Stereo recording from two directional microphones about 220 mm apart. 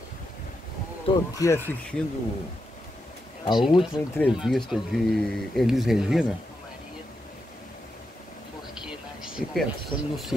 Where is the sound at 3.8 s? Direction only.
5° left (ahead or behind).